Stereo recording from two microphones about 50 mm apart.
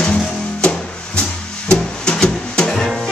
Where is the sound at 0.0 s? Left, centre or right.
Centre.